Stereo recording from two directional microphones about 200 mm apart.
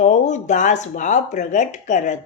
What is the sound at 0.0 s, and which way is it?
A woman's voice, 35° left (ahead or behind).